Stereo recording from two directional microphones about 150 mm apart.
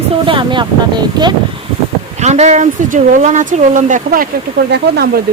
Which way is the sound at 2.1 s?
50° right (ahead or behind).